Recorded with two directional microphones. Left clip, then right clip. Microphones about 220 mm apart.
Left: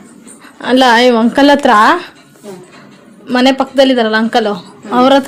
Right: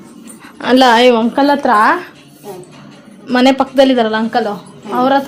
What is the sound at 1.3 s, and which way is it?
Speech, 15° left (ahead or behind).